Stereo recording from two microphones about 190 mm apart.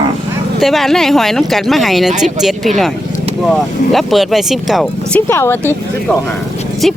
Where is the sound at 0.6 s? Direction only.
Centre (ahead or behind).